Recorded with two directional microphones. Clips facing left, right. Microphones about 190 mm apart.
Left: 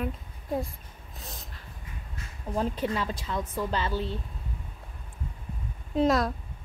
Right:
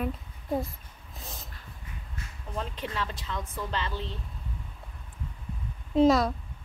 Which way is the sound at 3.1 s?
40° left (ahead or behind).